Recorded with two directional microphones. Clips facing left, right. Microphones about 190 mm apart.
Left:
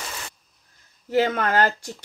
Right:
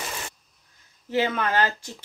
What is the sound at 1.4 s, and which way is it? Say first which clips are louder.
Speech: left 3 dB; 50° left (ahead or behind).